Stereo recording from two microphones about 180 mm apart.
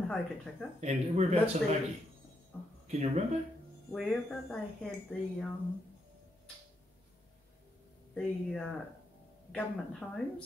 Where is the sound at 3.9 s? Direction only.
5° left (ahead or behind).